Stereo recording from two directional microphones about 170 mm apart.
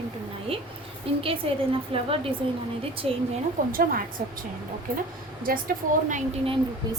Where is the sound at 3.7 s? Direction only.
55° right (ahead or behind).